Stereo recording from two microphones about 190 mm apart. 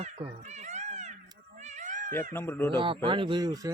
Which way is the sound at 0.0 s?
35° right (ahead or behind).